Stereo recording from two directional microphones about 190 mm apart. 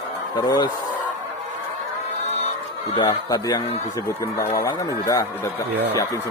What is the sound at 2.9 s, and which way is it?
Speech, 20° left (ahead or behind).